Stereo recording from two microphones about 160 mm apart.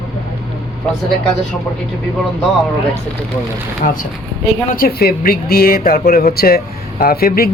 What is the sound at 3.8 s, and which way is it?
Speech, 50° left (ahead or behind).